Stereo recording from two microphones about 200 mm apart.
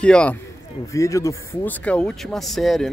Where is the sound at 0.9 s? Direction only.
15° left (ahead or behind).